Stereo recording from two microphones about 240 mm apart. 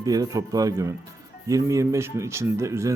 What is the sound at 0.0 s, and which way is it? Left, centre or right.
A man's voice, centre.